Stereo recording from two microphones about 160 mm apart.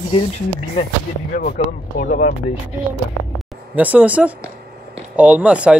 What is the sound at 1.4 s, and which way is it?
Speech, 55° left (ahead or behind).